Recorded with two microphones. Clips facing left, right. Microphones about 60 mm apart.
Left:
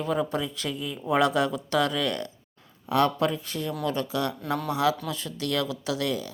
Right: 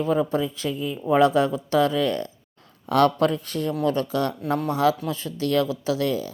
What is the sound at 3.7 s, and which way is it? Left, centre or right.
Speech, right.